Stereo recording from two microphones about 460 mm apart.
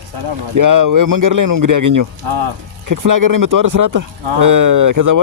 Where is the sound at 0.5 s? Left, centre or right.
Right.